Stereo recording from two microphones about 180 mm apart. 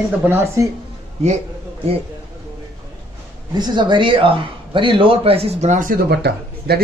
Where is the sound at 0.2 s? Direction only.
15° right (ahead or behind).